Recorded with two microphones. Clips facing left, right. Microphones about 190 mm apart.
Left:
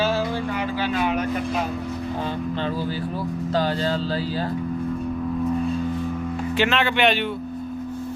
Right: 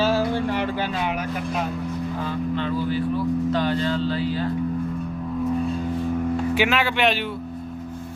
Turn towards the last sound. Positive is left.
turn(degrees=0)  # may be behind; listen again after turning